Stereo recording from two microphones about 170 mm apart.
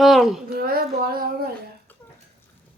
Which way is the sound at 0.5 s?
60° right (ahead or behind).